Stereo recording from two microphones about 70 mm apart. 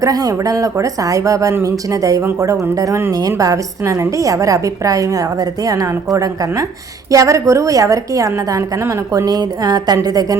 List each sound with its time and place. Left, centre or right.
0.0 s a woman's voice: right
7.1 s a woman's voice: right
8.8 s a woman's voice: right
9.2 s a woman's voice: right